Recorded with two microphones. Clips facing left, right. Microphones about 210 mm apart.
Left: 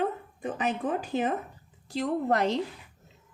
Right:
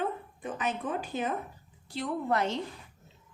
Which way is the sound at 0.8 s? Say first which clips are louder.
Left 4 dB; 40° left (ahead or behind).